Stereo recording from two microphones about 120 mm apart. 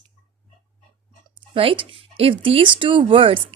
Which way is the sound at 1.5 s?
50° right (ahead or behind).